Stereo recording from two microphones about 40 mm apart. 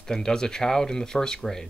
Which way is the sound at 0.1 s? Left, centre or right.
Centre.